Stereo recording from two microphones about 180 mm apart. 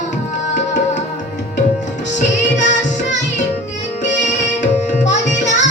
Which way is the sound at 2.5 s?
40° left (ahead or behind).